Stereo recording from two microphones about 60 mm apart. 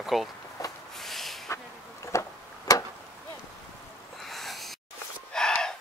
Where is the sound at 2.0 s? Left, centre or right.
Left.